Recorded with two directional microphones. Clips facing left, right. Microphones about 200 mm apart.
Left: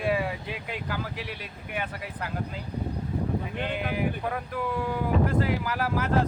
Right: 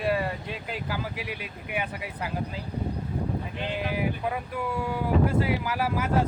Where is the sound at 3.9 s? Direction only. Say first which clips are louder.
Even; 5° right (ahead or behind).